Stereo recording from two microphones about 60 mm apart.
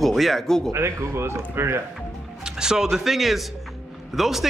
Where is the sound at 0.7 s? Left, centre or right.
Right.